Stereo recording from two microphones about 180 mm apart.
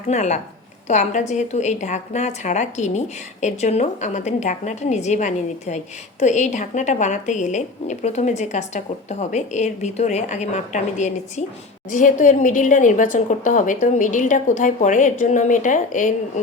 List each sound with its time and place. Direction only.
0.1 s a woman's voice: 40° left (ahead or behind)